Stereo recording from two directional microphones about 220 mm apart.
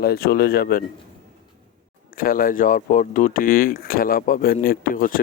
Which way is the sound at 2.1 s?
40° left (ahead or behind).